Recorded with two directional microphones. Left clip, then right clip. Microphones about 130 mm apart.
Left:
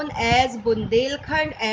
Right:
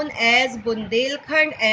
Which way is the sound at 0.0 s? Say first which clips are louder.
Right 2 dB; 50° left (ahead or behind).